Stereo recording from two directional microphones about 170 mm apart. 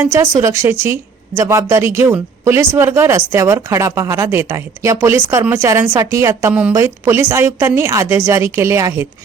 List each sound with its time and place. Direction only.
0.0 s speech: 15° right (ahead or behind)
6.5 s speech: 5° right (ahead or behind)